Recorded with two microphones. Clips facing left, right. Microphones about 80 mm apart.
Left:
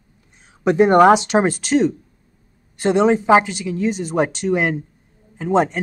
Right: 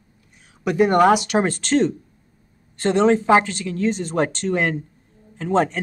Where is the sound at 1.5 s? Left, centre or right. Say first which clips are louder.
Left 2 dB; centre.